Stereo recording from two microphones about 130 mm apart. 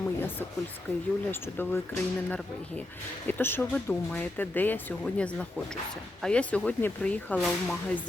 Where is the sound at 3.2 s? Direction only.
15° left (ahead or behind).